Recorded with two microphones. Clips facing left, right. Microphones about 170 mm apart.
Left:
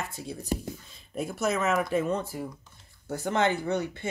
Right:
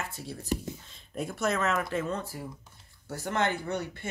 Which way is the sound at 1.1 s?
5° left (ahead or behind).